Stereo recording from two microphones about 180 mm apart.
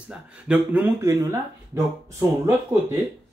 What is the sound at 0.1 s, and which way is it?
Speech, 10° right (ahead or behind).